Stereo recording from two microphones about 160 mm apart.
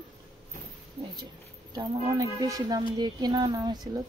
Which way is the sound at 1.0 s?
25° right (ahead or behind).